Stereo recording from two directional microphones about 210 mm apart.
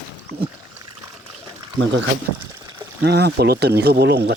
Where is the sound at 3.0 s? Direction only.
50° right (ahead or behind).